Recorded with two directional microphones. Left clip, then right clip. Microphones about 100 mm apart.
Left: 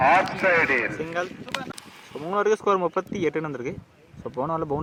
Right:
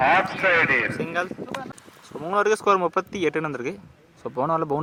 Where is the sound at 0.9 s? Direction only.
20° right (ahead or behind).